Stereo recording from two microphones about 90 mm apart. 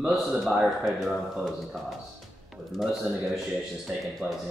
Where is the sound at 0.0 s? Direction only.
5° right (ahead or behind).